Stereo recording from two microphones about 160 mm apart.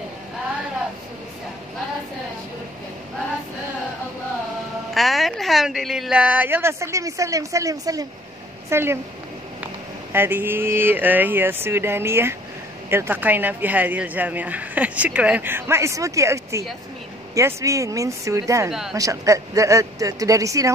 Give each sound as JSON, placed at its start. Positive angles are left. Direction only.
{"t": 4.9, "sound": "speech", "side_deg": 0}
{"t": 10.1, "sound": "speech", "side_deg": -15}
{"t": 18.7, "sound": "speech", "side_deg": -5}
{"t": 18.9, "sound": "speech", "side_deg": -20}